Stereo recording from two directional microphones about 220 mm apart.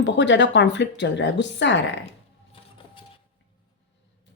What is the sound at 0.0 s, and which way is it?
Speech, 55° left (ahead or behind).